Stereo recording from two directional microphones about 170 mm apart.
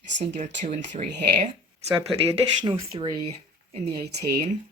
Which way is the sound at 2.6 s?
30° right (ahead or behind).